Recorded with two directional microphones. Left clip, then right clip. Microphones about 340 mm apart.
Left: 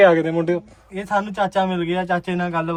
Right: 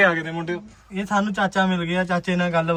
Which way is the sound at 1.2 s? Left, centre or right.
Left.